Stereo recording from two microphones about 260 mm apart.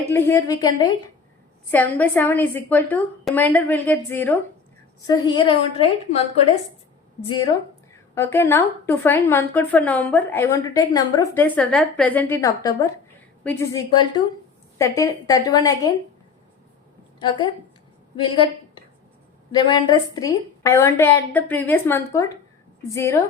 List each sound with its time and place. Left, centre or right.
0.1 s a woman's voice: centre
7.3 s a woman's voice: centre
17.2 s a woman's voice: centre